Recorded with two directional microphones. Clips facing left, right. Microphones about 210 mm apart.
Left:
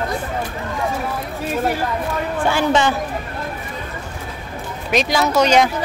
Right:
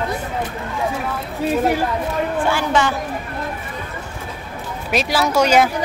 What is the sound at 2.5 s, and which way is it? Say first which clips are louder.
Speech: left 5 dB; 20° left (ahead or behind).